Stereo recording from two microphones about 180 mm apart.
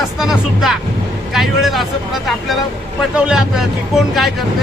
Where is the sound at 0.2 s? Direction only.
Centre (ahead or behind).